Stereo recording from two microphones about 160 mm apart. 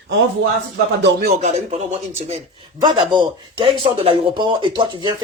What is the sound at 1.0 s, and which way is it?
Speech, 75° right (ahead or behind).